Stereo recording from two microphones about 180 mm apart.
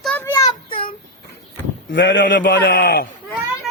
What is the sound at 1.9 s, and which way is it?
Speech, 90° left.